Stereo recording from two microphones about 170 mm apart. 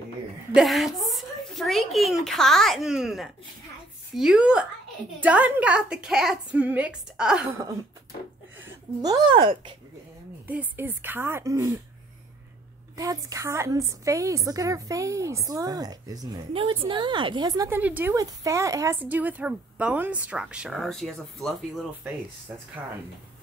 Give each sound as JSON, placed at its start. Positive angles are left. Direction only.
{"t": 0.6, "sound": "speech", "side_deg": 0}
{"t": 9.0, "sound": "a woman's voice", "side_deg": -25}
{"t": 10.4, "sound": "a woman's voice", "side_deg": -10}
{"t": 12.9, "sound": "a woman's voice", "side_deg": -20}
{"t": 17.6, "sound": "a woman's voice", "side_deg": -10}